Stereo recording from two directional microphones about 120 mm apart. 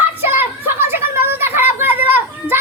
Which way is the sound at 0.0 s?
15° right (ahead or behind).